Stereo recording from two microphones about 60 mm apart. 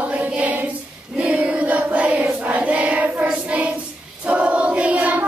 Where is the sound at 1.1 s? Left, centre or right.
Centre.